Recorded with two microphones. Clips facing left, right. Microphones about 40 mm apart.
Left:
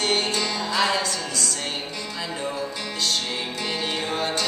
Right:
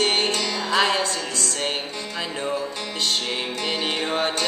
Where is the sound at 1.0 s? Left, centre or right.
Right.